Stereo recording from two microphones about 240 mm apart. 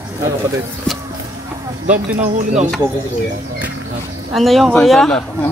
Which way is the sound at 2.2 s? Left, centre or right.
Right.